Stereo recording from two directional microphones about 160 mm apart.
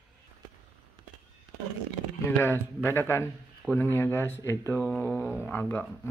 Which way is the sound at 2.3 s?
15° left (ahead or behind).